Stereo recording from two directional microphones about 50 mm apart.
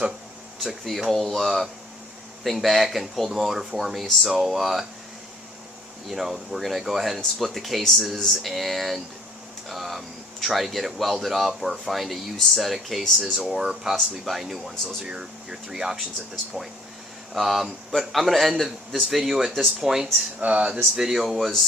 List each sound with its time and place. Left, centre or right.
0.6 s speech: centre
6.1 s speech: centre
9.6 s a sound: centre
10.4 s speech: centre
13.6 s speech: centre
20.4 s speech: right
20.9 s speech: centre
21.3 s speech: centre